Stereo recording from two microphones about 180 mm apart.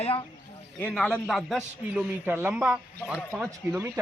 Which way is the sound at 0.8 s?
5° left (ahead or behind).